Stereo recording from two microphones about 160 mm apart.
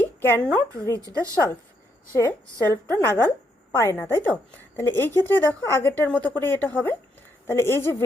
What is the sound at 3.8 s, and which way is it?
Speech, 15° left (ahead or behind).